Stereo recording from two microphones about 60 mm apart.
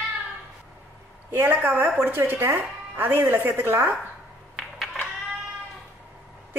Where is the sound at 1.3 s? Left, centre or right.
Right.